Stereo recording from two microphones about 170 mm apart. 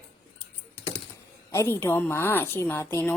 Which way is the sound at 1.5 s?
15° left (ahead or behind).